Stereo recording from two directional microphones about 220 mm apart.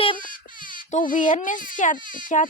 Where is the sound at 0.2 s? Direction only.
40° left (ahead or behind).